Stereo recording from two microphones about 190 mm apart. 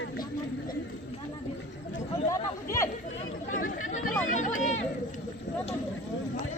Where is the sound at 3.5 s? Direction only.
40° left (ahead or behind).